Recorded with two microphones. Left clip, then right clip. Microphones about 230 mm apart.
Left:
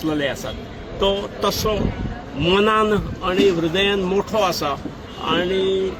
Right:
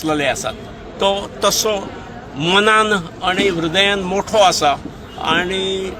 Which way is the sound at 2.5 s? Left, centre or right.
Right.